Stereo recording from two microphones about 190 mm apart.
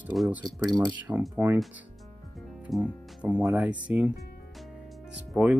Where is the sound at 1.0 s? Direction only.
10° right (ahead or behind).